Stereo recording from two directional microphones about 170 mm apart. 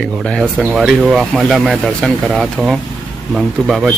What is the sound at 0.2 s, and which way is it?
Speech, 5° left (ahead or behind).